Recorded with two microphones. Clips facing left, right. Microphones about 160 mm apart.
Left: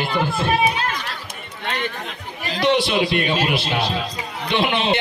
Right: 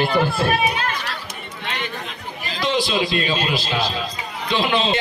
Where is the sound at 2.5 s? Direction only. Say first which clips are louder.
Left 3 dB; 65° left (ahead or behind).